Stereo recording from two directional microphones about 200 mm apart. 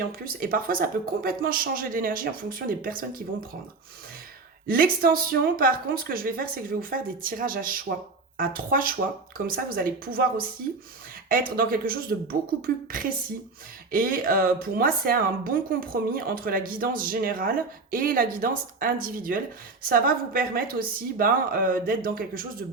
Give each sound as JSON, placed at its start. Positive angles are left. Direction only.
{"t": 0.3, "sound": "speech", "side_deg": -45}
{"t": 4.6, "sound": "speech", "side_deg": -45}